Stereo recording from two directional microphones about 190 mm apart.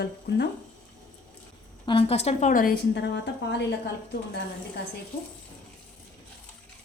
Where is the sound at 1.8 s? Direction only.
30° left (ahead or behind); by 3.6 s 65° left (ahead or behind).